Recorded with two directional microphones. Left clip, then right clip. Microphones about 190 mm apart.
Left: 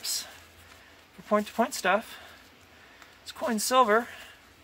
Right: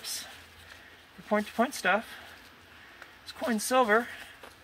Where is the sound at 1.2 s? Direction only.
15° left (ahead or behind).